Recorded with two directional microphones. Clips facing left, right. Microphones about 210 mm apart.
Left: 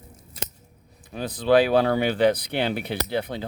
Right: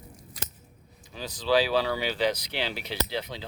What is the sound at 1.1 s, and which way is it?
Speech, 55° left (ahead or behind).